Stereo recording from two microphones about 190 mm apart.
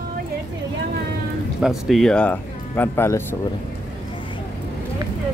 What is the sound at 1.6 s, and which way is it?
Speech, centre (ahead or behind).